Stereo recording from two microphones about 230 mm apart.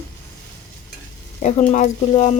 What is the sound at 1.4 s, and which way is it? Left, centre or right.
Stir, left.